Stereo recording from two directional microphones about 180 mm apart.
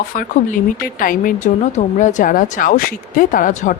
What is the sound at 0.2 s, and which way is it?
A woman's voice, 50° left (ahead or behind).